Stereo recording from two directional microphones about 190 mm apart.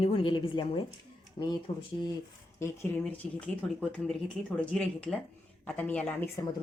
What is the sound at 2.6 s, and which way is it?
Speech, 10° left (ahead or behind).